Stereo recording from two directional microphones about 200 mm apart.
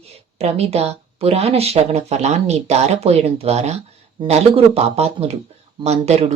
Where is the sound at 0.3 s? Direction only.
30° right (ahead or behind).